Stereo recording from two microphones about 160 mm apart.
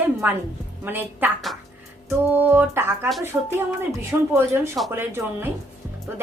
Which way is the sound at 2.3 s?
10° right (ahead or behind).